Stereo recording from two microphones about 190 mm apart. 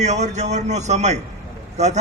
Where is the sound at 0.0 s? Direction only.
35° right (ahead or behind).